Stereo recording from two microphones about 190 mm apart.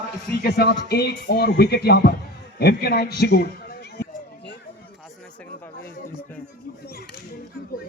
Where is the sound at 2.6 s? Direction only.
55° left (ahead or behind).